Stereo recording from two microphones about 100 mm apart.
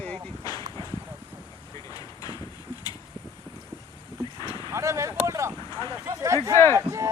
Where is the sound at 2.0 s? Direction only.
40° left (ahead or behind).